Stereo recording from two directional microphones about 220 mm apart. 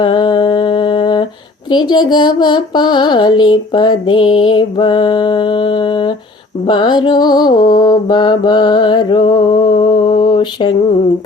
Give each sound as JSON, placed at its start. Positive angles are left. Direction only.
{"t": 0.0, "sound": "mantra", "side_deg": 20}
{"t": 1.7, "sound": "music", "side_deg": 20}